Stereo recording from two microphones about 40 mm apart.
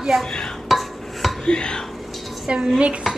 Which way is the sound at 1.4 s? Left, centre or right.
Left.